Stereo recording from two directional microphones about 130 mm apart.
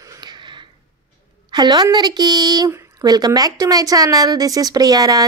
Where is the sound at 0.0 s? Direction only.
30° right (ahead or behind).